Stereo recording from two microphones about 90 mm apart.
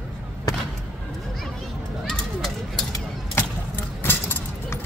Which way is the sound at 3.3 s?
25° left (ahead or behind).